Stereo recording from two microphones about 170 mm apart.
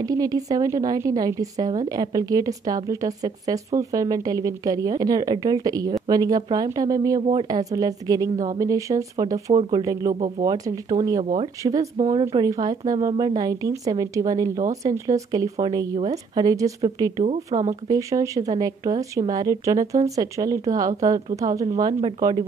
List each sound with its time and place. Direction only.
0.0 s a woman's voice: 20° right (ahead or behind)
7.2 s speech: 40° right (ahead or behind)
7.4 s a woman's voice: 20° right (ahead or behind)
12.0 s a woman's voice: 30° right (ahead or behind)
17.5 s speech: 35° right (ahead or behind)
17.8 s a woman's voice: 20° right (ahead or behind)